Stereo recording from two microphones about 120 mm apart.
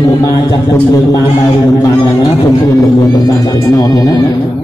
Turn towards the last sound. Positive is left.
turn(degrees=30)  # may be behind; listen again after turning